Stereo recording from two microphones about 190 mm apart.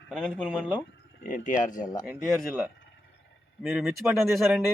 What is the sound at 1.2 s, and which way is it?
Speech, 45° left (ahead or behind).